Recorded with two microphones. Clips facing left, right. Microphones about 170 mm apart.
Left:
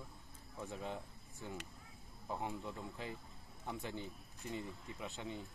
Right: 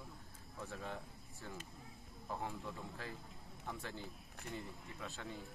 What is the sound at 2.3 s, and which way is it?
Speech, 20° left (ahead or behind).